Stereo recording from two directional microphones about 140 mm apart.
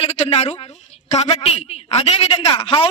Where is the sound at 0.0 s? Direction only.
45° left (ahead or behind).